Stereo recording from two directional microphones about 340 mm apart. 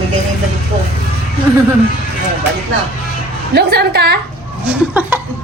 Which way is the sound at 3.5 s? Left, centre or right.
Right.